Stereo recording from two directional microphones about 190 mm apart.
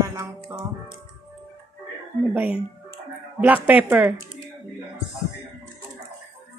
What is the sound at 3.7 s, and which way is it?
Music, 10° right (ahead or behind).